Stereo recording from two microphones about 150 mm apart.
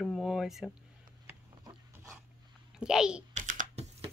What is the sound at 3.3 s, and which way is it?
Computer keyboard, 60° right (ahead or behind).